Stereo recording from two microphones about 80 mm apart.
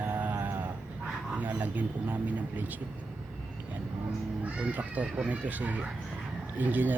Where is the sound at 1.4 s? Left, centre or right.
Right.